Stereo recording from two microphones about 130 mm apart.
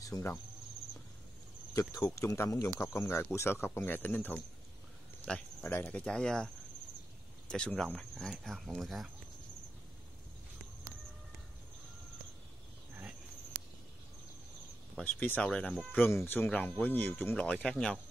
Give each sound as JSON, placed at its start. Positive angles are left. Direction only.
{"t": 0.0, "sound": "cricket", "side_deg": 25}
{"t": 2.0, "sound": "speech", "side_deg": 20}
{"t": 15.0, "sound": "speech", "side_deg": 15}